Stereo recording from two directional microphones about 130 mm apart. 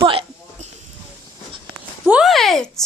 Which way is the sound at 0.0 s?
45° right (ahead or behind).